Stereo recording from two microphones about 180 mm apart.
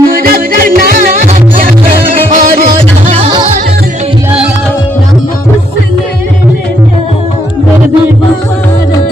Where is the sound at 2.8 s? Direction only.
30° right (ahead or behind).